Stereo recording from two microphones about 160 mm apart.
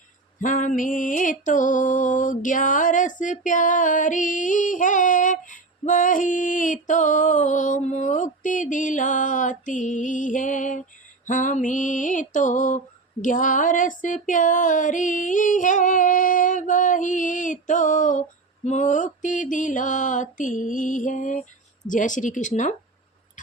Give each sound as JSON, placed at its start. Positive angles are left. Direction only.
{"t": 0.4, "sound": "music", "side_deg": 55}